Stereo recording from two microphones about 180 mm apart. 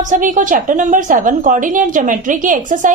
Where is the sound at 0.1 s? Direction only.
45° right (ahead or behind).